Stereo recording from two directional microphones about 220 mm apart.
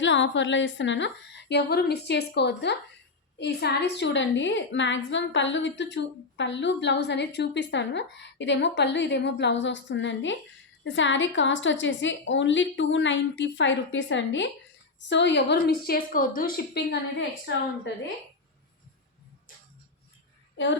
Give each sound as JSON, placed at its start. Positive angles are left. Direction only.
{"t": 0.0, "sound": "a woman's voice", "side_deg": 55}